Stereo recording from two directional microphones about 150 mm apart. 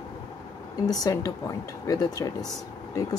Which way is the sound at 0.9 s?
25° left (ahead or behind).